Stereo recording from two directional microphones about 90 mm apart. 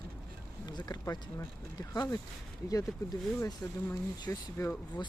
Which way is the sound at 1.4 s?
30° left (ahead or behind).